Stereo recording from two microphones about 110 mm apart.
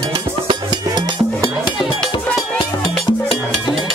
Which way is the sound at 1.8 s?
Centre (ahead or behind).